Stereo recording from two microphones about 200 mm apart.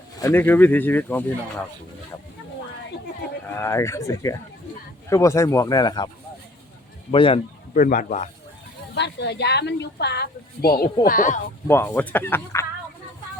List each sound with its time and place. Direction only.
0.2 s speech: 10° left (ahead or behind)
3.4 s speech: 15° left (ahead or behind)
7.1 s speech: 25° left (ahead or behind)
7.7 s speech: 40° left (ahead or behind)
9.0 s a woman's voice: 60° left (ahead or behind); by 11.3 s 40° left (ahead or behind)
11.7 s speech: 10° left (ahead or behind)